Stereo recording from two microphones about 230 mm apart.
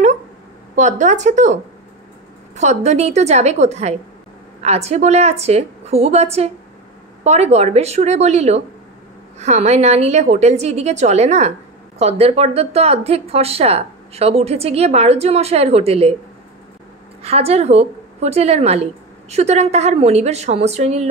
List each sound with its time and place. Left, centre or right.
0.7 s speech: right
17.2 s speech: right